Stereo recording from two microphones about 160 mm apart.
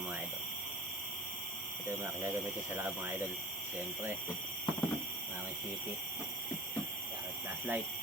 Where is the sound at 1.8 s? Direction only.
15° right (ahead or behind).